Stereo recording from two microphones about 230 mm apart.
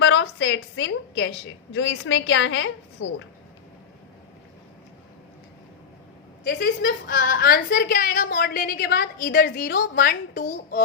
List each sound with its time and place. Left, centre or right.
0.0 s a woman's voice: left
6.4 s a woman's voice: left